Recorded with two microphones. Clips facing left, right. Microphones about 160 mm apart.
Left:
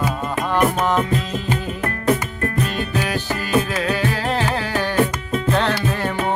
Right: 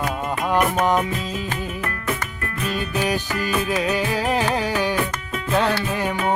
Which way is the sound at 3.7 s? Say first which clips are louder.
Even; 15° right (ahead or behind).